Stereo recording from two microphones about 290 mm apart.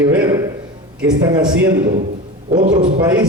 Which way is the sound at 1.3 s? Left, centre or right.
Centre.